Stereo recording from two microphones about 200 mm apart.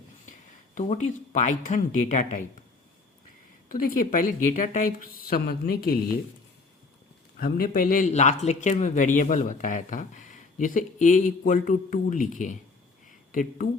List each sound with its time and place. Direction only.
0.8 s speech: 35° left (ahead or behind)
3.7 s a woman's voice: 40° left (ahead or behind)
7.3 s a woman's voice: 50° left (ahead or behind)